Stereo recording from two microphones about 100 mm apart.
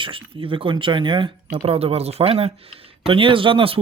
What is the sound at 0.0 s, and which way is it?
Speech, 65° right (ahead or behind).